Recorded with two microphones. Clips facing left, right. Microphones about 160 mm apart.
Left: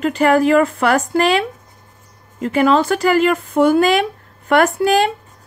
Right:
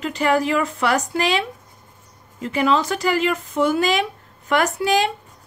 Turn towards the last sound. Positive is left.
turn(degrees=55)  # may be behind; listen again after turning